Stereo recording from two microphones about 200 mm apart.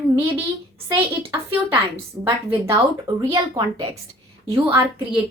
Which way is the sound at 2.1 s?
15° right (ahead or behind).